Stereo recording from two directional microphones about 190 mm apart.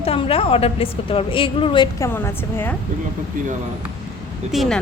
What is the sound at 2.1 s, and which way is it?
Speech, 10° left (ahead or behind).